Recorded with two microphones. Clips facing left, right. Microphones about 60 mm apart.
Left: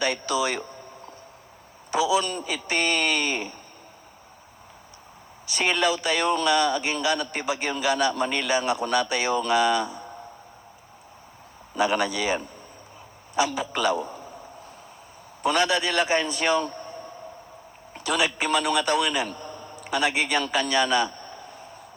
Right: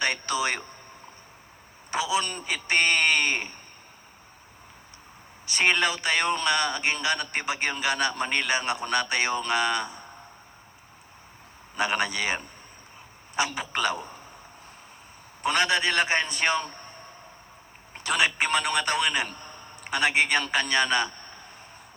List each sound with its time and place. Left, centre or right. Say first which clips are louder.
0.0 s a man's voice: left 2 dB; right
1.9 s a man's voice: left 4 dB; right
5.5 s a man's voice: even; right
11.7 s a man's voice: left 3 dB; right
15.4 s a man's voice: left 1 dB; right
17.9 s a man's voice: even; right